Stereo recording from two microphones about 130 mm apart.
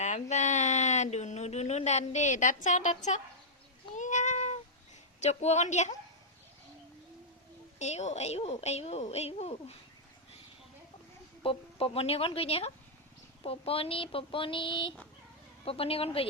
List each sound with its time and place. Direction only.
0.0 s speech: 65° left (ahead or behind)
3.9 s cat: 70° left (ahead or behind)
5.2 s a woman's voice: 60° left (ahead or behind)
7.8 s a woman's voice: 60° left (ahead or behind)
11.4 s speech: 45° left (ahead or behind)